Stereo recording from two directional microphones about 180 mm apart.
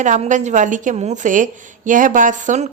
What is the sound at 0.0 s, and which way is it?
A woman's voice, 45° right (ahead or behind).